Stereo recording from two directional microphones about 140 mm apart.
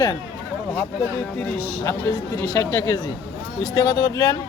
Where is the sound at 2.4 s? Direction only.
20° left (ahead or behind).